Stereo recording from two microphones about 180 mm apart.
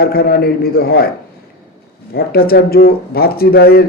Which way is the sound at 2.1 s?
55° left (ahead or behind).